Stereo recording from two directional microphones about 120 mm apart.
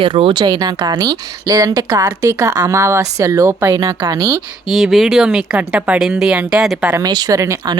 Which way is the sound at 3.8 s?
35° right (ahead or behind).